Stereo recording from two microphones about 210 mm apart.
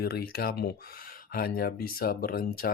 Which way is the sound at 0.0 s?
50° left (ahead or behind).